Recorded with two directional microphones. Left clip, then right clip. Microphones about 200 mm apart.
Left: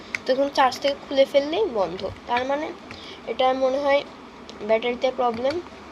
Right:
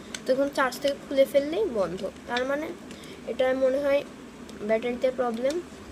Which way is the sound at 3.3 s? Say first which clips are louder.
Left 3 dB; 30° right (ahead or behind).